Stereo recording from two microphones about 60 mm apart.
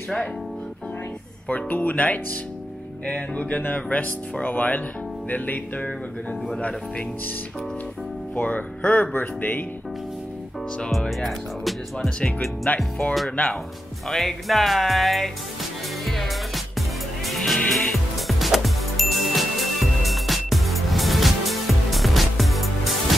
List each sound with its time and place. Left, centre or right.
1.5 s speech: left
8.4 s speech: left
10.9 s speech: centre
12.2 s speech: centre
12.6 s speech: left
14.0 s speech: centre
16.1 s music: centre